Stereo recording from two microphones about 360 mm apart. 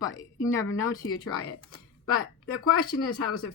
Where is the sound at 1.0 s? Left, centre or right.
Left.